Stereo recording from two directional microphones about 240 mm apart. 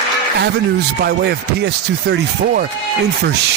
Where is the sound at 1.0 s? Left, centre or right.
Right.